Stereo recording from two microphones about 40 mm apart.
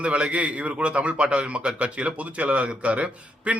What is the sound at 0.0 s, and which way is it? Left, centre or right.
A man's voice, right.